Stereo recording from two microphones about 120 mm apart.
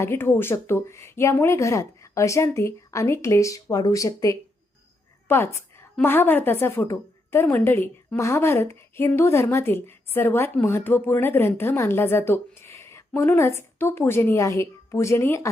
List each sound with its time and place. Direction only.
0.0 s a woman's voice: 20° left (ahead or behind)